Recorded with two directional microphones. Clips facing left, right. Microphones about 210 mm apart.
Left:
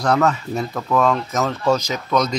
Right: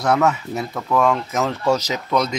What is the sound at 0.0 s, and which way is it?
A man's voice, 5° right (ahead or behind).